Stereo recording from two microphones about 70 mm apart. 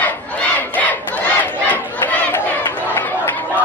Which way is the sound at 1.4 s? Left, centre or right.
Left.